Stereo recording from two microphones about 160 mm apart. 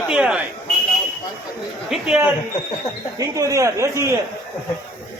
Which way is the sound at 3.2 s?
20° right (ahead or behind).